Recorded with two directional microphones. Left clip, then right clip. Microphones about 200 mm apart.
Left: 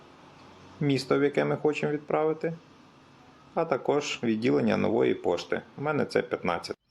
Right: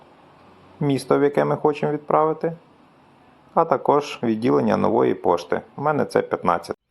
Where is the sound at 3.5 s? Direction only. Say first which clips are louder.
Right 9 dB; 15° right (ahead or behind).